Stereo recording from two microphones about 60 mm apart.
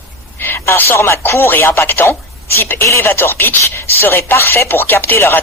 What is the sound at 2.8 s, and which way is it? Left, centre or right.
Speech, left.